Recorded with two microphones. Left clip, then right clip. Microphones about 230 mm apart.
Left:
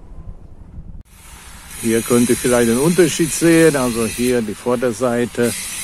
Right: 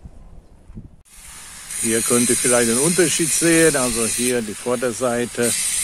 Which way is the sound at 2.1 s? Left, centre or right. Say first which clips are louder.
Left 3 dB; centre.